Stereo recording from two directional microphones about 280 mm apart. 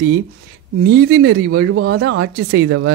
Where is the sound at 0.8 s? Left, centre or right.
Right.